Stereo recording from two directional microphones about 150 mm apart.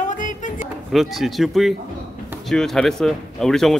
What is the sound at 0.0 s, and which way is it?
Music, 55° left (ahead or behind).